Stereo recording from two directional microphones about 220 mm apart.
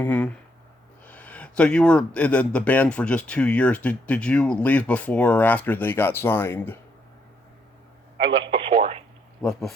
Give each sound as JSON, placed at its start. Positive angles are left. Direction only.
{"t": 0.0, "sound": "a man's voice", "side_deg": 5}
{"t": 8.4, "sound": "radio", "side_deg": -25}
{"t": 9.4, "sound": "speech", "side_deg": 0}